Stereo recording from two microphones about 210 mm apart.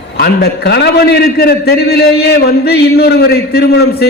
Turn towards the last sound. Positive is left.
turn(degrees=50)  # may be behind; listen again after turning